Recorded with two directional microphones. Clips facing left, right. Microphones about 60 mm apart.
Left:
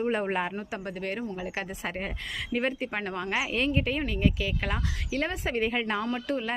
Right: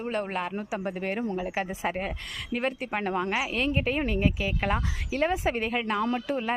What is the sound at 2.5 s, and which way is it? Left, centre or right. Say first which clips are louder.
Speech: even; centre.